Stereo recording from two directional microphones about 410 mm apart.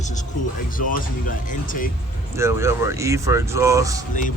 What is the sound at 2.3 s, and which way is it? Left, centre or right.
Speech, centre.